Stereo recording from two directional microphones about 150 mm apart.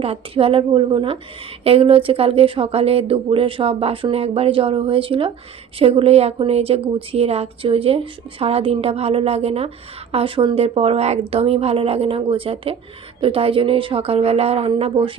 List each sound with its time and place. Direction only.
0.0 s speech: 40° right (ahead or behind)